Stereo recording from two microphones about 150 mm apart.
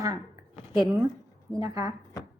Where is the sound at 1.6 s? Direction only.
25° right (ahead or behind).